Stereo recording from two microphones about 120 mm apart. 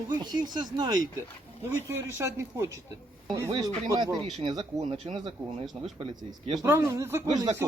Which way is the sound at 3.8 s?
35° right (ahead or behind).